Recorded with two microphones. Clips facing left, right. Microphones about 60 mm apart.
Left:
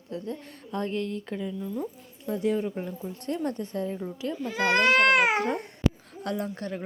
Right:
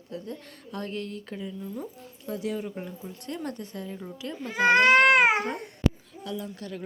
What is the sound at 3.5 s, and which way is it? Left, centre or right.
Speech, left.